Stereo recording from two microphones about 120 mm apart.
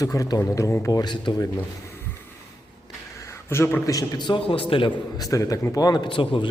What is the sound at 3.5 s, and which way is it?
Speech, 20° left (ahead or behind).